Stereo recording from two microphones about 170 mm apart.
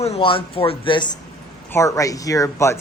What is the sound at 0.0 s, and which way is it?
Speech, 35° left (ahead or behind).